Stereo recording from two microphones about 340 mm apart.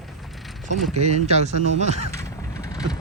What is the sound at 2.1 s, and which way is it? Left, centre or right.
Vehicle, centre.